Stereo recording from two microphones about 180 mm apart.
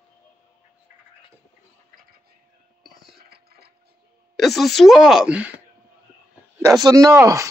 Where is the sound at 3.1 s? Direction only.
60° right (ahead or behind).